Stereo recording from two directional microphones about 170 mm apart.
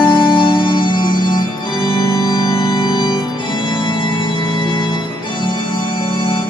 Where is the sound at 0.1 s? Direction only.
30° left (ahead or behind).